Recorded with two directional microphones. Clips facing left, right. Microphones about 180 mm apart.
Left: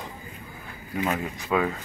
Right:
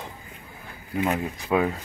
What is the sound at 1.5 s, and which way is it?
Speech, 10° right (ahead or behind).